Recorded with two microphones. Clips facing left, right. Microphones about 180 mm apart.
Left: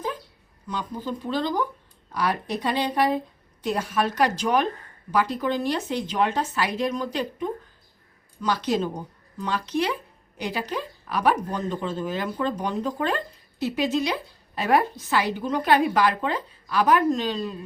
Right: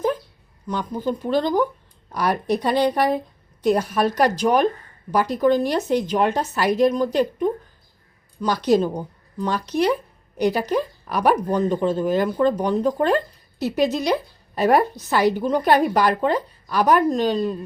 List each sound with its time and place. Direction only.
1.3 s a woman's voice: 50° right (ahead or behind)